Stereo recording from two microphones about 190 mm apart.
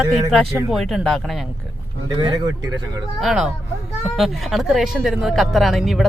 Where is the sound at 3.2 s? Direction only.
Centre (ahead or behind).